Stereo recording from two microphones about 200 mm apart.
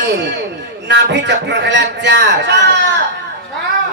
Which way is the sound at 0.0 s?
60° right (ahead or behind).